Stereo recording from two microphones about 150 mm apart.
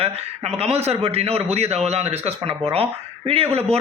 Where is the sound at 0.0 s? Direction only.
45° right (ahead or behind).